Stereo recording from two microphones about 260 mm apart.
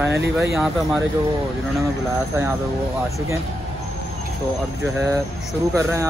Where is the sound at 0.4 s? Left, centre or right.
Centre.